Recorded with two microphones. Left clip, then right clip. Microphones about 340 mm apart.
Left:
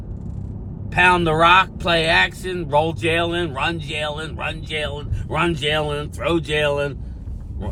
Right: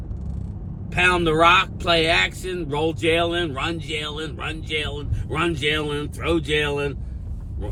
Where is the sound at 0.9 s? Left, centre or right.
Centre.